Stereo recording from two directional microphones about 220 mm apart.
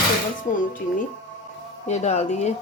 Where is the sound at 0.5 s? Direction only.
35° left (ahead or behind).